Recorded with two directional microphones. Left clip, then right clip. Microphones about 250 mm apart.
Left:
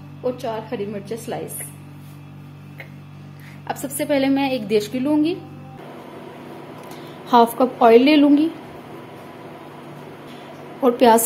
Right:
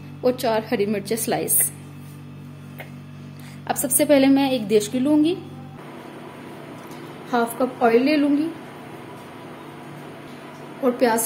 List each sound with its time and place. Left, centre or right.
0.2 s a woman's voice: right
3.6 s a woman's voice: right; by 5.3 s centre
7.2 s a woman's voice: left
10.8 s a woman's voice: left